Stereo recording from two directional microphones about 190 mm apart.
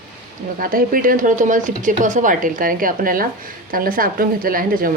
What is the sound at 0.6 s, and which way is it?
Speech, 50° right (ahead or behind).